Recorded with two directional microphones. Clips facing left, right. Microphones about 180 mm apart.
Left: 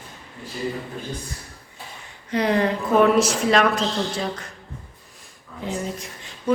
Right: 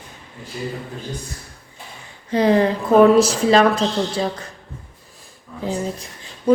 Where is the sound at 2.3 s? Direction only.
30° right (ahead or behind).